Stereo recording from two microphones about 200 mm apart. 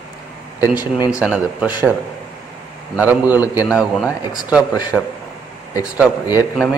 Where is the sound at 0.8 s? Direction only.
20° left (ahead or behind).